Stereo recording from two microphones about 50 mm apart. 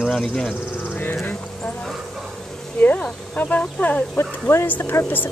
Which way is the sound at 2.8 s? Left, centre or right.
Left.